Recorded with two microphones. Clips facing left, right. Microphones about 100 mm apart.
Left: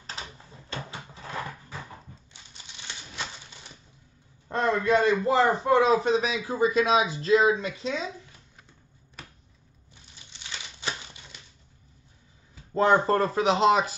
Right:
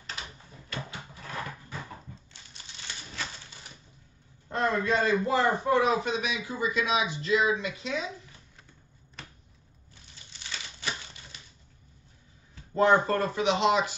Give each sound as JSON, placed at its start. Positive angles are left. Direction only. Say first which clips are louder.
{"t": 0.0, "sound": "a sound", "louder": "left 1 dB", "side_deg": 30}
{"t": 4.5, "sound": "a man's voice", "louder": "left 3 dB", "side_deg": 30}
{"t": 10.5, "sound": "typewriter", "louder": "left 1 dB", "side_deg": 25}
{"t": 12.7, "sound": "a man's voice", "louder": "left 2 dB", "side_deg": 30}